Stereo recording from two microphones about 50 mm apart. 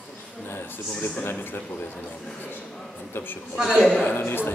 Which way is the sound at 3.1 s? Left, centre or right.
Left.